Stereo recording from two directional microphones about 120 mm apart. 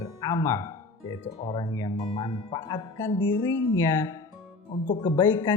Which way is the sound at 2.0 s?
45° left (ahead or behind).